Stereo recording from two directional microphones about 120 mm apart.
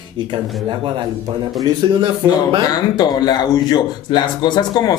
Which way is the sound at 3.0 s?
35° left (ahead or behind).